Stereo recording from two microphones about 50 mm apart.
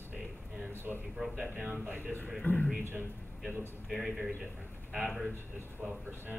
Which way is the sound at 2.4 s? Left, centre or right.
Left.